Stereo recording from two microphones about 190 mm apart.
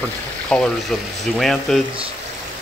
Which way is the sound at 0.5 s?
5° left (ahead or behind).